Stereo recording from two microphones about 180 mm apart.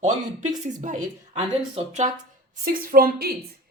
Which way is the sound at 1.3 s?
35° right (ahead or behind).